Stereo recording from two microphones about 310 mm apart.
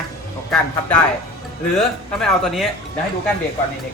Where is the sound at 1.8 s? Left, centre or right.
Centre.